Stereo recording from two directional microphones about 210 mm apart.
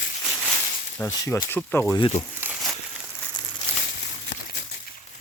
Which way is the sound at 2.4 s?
Centre (ahead or behind).